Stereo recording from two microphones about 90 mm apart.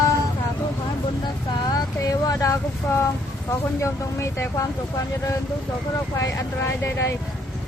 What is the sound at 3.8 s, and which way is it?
Speech, 30° left (ahead or behind).